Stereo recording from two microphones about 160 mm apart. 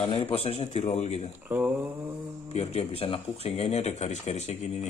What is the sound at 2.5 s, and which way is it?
Speech, 40° left (ahead or behind).